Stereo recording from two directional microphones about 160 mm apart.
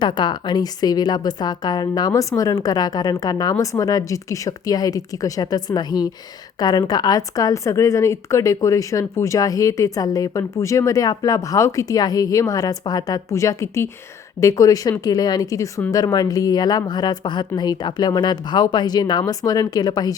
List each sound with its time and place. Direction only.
0.0 s a woman's voice: 30° left (ahead or behind)